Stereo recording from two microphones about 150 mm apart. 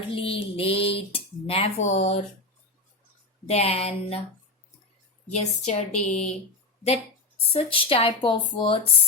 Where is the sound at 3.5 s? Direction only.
45° left (ahead or behind).